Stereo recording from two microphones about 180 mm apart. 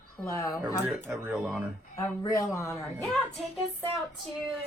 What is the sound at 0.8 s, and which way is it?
Speech, 5° right (ahead or behind).